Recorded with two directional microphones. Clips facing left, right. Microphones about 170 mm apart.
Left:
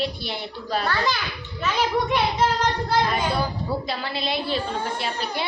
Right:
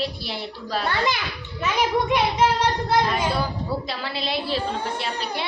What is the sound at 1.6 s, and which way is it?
Speech, 15° right (ahead or behind).